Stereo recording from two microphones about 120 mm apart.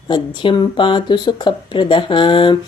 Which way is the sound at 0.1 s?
40° left (ahead or behind).